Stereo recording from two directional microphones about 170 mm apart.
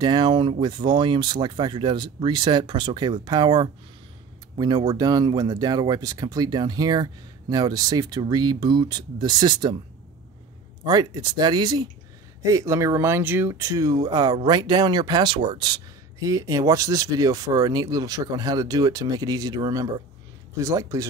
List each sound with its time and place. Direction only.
0.0 s speech: 25° right (ahead or behind)
10.9 s speech: 25° right (ahead or behind)